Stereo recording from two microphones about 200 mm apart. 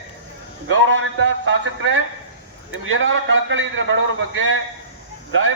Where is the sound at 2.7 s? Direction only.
80° right.